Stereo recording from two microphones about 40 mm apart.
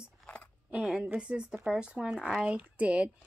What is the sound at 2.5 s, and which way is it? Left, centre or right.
Speech, right.